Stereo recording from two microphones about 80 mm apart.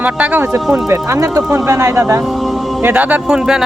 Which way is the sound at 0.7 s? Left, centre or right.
Right.